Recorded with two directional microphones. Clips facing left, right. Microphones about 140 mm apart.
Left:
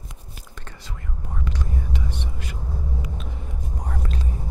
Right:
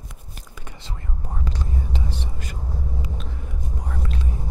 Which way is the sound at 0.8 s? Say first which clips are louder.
Right 2 dB; 30° right (ahead or behind).